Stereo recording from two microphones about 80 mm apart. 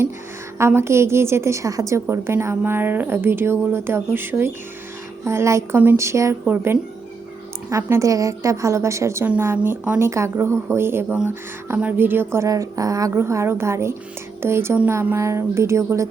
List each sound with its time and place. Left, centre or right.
0.6 s a woman's voice: right
6.4 s speech: right
7.7 s a woman's voice: right
12.5 s a woman's voice: right